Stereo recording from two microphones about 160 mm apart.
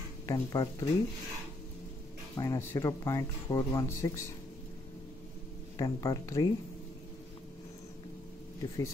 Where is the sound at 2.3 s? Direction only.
20° left (ahead or behind).